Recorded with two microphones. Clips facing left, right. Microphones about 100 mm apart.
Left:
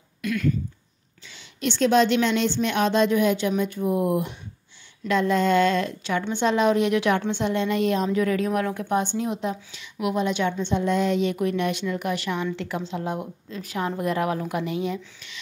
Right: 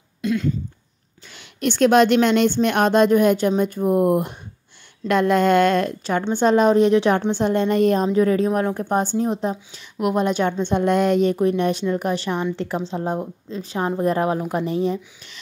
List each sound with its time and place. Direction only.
0.2 s a sound: 25° right (ahead or behind)
1.3 s a woman's voice: 55° right (ahead or behind)
8.1 s a woman's voice: 30° right (ahead or behind); by 11.3 s 50° right (ahead or behind)
11.3 s speech: 35° right (ahead or behind)